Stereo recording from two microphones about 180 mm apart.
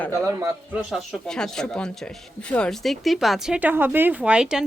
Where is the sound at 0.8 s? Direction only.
Centre (ahead or behind).